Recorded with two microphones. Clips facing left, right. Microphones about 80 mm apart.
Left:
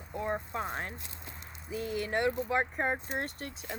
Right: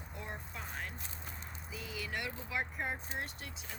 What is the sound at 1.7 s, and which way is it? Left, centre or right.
Speech, left.